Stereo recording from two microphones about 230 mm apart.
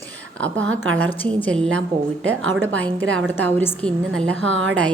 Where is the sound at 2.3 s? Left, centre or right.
Right.